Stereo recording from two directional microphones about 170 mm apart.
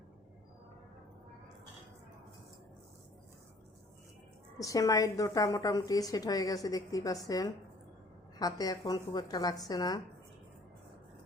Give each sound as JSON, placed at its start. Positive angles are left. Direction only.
{"t": 4.5, "sound": "a woman's voice", "side_deg": 20}